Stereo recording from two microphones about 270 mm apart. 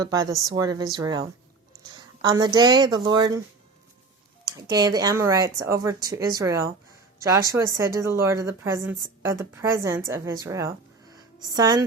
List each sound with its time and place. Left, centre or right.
0.0 s speech: centre
4.5 s speech: centre